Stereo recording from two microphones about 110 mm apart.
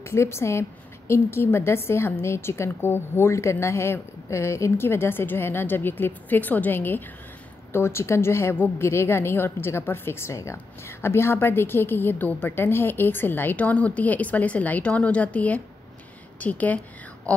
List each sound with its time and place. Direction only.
0.0 s a woman's voice: 25° left (ahead or behind)